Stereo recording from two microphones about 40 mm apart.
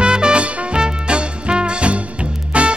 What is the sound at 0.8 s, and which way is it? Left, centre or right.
Swing music, right.